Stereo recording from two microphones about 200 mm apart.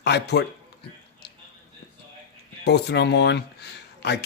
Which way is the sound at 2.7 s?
55° left (ahead or behind).